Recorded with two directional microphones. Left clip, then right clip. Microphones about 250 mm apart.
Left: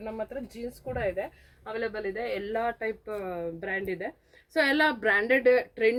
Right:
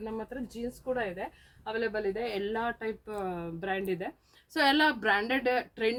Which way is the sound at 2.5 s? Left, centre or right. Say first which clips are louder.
Left 3 dB; centre.